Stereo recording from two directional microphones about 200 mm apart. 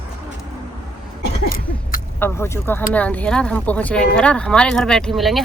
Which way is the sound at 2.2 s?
10° left (ahead or behind).